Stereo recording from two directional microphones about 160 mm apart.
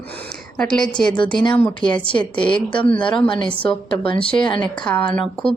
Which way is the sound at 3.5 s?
5° left (ahead or behind).